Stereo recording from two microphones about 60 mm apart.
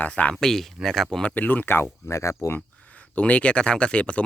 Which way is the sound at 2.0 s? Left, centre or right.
Left.